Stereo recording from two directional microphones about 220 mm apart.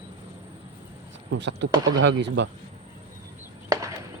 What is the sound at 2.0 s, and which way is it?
Speech, 55° right (ahead or behind).